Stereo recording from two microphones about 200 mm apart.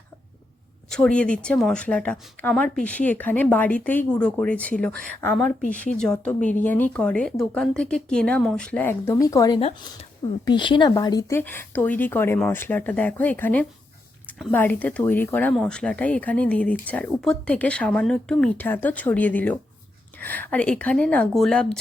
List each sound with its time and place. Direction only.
0.9 s speech: 5° left (ahead or behind)
9.6 s speech: 30° left (ahead or behind); by 21.8 s 5° left (ahead or behind)